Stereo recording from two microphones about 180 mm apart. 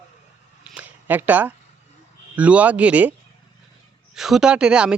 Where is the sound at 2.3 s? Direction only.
5° right (ahead or behind).